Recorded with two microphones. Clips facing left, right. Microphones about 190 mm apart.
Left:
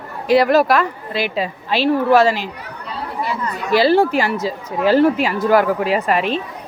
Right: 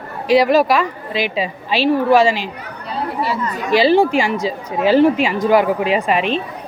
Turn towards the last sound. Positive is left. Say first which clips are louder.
# right 1 dB
turn(degrees=-20)  # may be behind; listen again after turning